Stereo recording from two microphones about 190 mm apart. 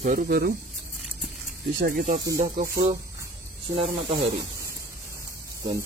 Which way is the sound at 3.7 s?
30° right (ahead or behind).